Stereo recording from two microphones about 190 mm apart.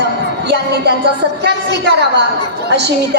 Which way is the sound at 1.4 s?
60° right (ahead or behind).